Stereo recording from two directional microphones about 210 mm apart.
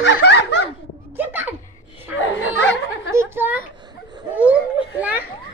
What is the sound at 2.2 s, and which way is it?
Chatter, 60° left (ahead or behind).